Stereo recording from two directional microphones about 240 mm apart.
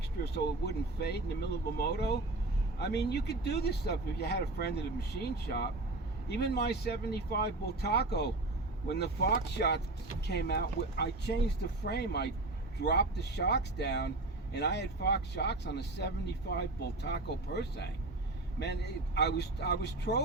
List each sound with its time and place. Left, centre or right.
0.3 s speech: left